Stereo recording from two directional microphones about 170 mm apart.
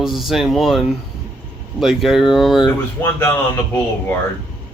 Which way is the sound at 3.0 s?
15° left (ahead or behind).